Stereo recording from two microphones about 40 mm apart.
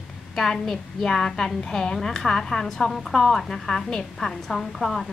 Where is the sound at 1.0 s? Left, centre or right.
Centre.